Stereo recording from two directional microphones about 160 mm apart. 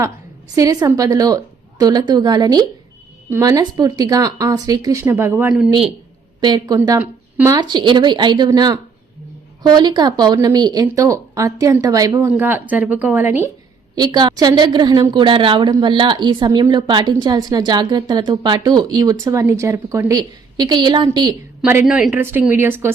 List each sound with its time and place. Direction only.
0.5 s a woman's voice: 20° right (ahead or behind)
6.4 s a woman's voice: 25° right (ahead or behind)
7.0 s a sound: 10° right (ahead or behind)
7.5 s a woman's voice: 25° right (ahead or behind)
13.9 s a woman's voice: 25° right (ahead or behind)
21.8 s speech: centre (ahead or behind)